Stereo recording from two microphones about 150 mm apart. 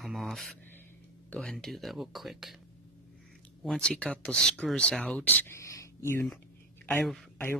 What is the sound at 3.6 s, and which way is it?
Speech, 5° left (ahead or behind).